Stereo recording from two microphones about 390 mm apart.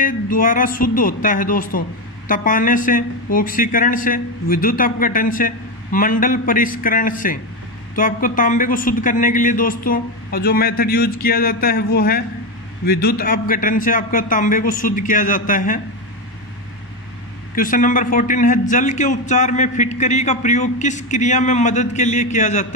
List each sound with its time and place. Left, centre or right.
0.0 s a man's voice: left
17.6 s a man's voice: centre